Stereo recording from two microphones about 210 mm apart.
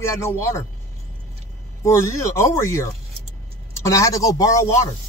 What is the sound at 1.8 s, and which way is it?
Speech, 15° left (ahead or behind).